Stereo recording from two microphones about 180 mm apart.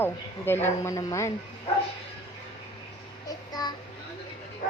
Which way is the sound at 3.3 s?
20° left (ahead or behind).